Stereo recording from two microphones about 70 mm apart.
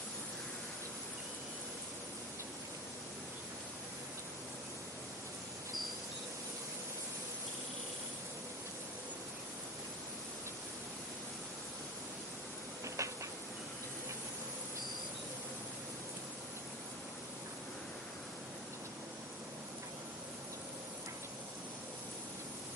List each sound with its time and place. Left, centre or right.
13.0 s train: right